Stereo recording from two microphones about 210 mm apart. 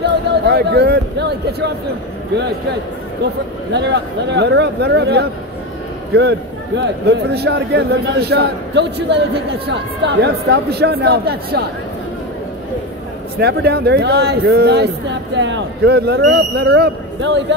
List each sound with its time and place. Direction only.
0.0 s a sound: 50° right (ahead or behind)
3.7 s a man's voice: 55° right (ahead or behind)
10.2 s a man's voice: 50° right (ahead or behind)
13.4 s a man's voice: 50° right (ahead or behind)